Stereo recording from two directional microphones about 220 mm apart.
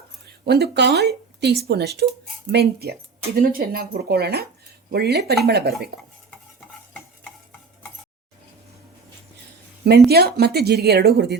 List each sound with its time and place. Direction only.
0.3 s speech: 50° right (ahead or behind)
10.1 s speech: 45° right (ahead or behind)